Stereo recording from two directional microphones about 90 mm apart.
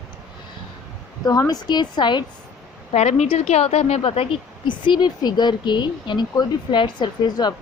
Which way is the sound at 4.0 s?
90° left.